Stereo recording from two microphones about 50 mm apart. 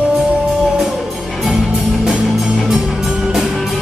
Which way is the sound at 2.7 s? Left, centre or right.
Centre.